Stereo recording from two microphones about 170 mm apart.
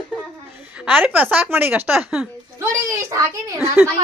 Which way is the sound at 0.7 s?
10° right (ahead or behind).